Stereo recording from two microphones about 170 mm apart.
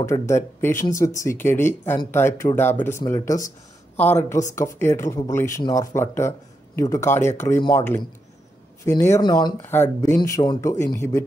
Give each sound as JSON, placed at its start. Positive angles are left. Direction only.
{"t": 0.0, "sound": "speech", "side_deg": 15}
{"t": 8.8, "sound": "speech", "side_deg": 15}
{"t": 9.6, "sound": "speech", "side_deg": 10}